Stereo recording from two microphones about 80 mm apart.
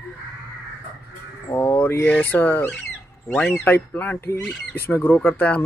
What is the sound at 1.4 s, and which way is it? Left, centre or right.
Speech, left.